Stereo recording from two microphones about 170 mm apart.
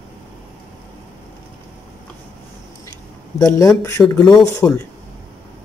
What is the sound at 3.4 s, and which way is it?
Speech, 20° left (ahead or behind).